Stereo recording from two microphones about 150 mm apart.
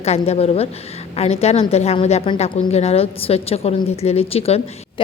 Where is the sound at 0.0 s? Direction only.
45° left (ahead or behind).